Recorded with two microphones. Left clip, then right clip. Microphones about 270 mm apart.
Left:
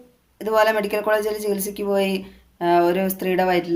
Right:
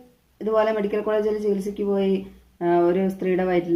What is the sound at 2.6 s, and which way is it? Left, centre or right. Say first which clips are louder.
Speech: left 2 dB; left.